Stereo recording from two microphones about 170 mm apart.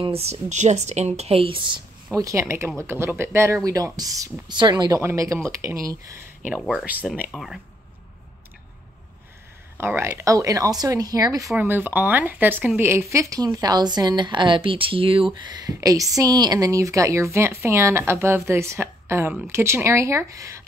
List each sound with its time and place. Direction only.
0.0 s speech: 35° right (ahead or behind)
2.1 s speech: 20° right (ahead or behind)
6.6 s speech: 5° right (ahead or behind)
9.8 s speech: 15° right (ahead or behind)